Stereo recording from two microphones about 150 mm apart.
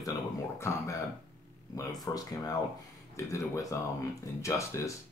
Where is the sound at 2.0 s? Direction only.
25° left (ahead or behind).